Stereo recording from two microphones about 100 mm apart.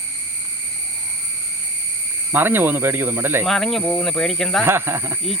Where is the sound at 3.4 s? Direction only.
Centre (ahead or behind).